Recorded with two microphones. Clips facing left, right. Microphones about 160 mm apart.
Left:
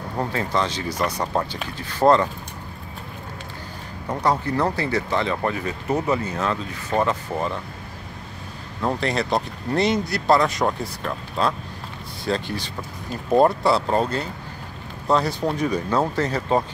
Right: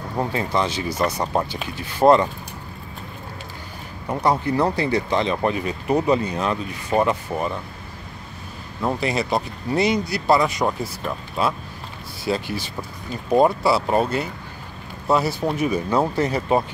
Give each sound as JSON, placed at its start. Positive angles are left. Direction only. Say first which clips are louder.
{"t": 0.2, "sound": "speech", "louder": "right 1 dB", "side_deg": -15}
{"t": 4.1, "sound": "speech", "louder": "right 2 dB", "side_deg": -10}
{"t": 8.8, "sound": "speech", "louder": "even", "side_deg": -5}